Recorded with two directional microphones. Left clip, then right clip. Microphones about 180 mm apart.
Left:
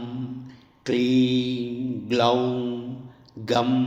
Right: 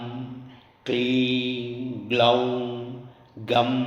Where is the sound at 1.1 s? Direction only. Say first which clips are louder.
Left 2 dB; 45° left (ahead or behind).